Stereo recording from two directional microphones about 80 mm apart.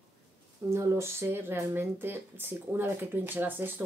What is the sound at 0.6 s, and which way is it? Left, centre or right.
Speech, right.